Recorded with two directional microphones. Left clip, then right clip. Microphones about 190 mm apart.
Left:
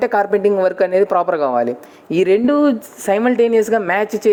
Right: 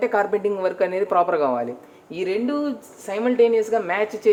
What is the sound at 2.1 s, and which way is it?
Speech, 50° left (ahead or behind).